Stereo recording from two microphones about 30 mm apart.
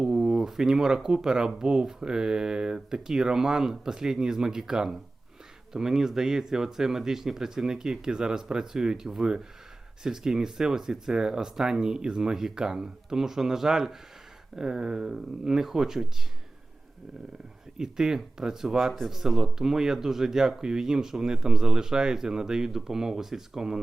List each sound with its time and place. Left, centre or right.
0.0 s speech: centre
10.0 s speech: centre
17.7 s speech: right